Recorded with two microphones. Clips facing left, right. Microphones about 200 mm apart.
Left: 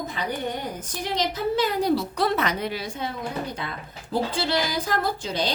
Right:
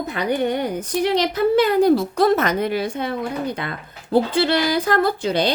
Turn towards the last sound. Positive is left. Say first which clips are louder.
# right 7 dB
turn(degrees=-65)  # may be behind; listen again after turning